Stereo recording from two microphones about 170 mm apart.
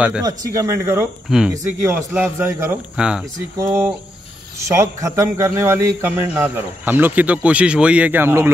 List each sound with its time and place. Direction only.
0.2 s speech: 20° right (ahead or behind)
1.3 s speech: 5° right (ahead or behind)
1.9 s a man's voice: 15° right (ahead or behind)
3.5 s a man's voice: 15° right (ahead or behind)